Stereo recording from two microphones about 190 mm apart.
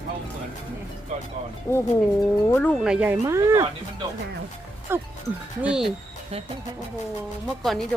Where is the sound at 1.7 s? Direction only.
15° left (ahead or behind).